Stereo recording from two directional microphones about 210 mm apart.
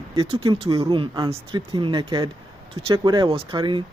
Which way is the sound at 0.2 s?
25° right (ahead or behind).